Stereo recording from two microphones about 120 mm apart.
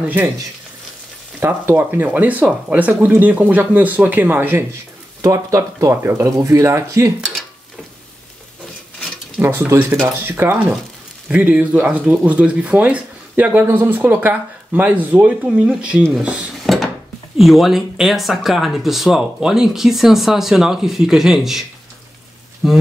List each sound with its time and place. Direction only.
1.4 s speech: 15° right (ahead or behind)
5.2 s speech: 25° right (ahead or behind)
7.2 s a sound: 5° right (ahead or behind)
9.4 s speech: 20° right (ahead or behind)
16.1 s dishes: 5° right (ahead or behind)
17.4 s speech: centre (ahead or behind)